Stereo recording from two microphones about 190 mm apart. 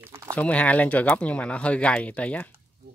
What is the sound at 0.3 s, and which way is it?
Speech, 5° left (ahead or behind).